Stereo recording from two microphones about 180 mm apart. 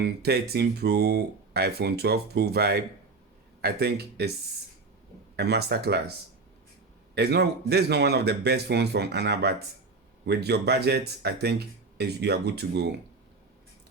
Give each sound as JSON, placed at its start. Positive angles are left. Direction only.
{"t": 0.0, "sound": "speech", "side_deg": -60}
{"t": 5.4, "sound": "speech", "side_deg": -65}
{"t": 7.2, "sound": "speech", "side_deg": -65}